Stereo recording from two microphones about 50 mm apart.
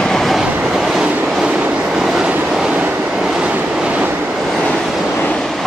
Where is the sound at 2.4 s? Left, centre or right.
Centre.